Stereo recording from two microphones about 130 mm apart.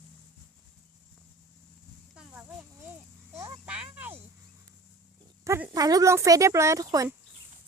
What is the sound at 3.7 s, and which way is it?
Cricket, 10° right (ahead or behind).